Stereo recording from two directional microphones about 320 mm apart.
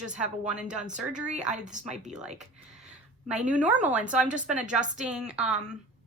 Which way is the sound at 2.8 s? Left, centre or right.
Right.